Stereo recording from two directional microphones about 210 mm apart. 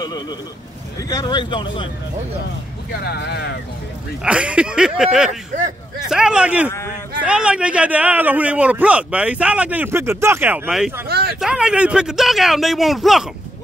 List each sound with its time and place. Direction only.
0.0 s a man's voice: 20° left (ahead or behind)
2.9 s speech: 50° left (ahead or behind)
4.2 s a man's voice: 5° right (ahead or behind)
11.1 s speech: 50° right (ahead or behind)
11.3 s speech: 5° right (ahead or behind)